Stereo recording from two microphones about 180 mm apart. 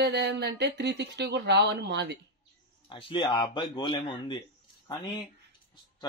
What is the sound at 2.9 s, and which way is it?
Speech, 30° left (ahead or behind).